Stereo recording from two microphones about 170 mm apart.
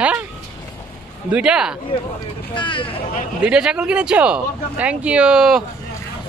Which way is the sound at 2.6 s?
30° left (ahead or behind).